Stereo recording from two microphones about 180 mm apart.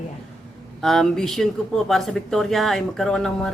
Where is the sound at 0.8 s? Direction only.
Centre (ahead or behind).